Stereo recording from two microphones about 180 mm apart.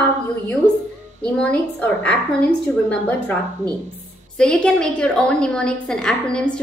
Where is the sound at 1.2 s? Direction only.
10° left (ahead or behind).